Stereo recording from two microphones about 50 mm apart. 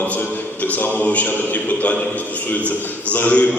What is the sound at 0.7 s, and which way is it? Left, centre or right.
A man's voice, left.